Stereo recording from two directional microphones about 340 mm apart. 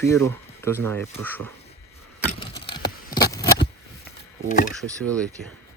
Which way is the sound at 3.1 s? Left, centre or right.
Centre.